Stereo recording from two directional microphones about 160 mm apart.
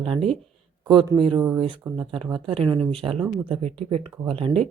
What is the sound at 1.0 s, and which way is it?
Speech, 30° right (ahead or behind).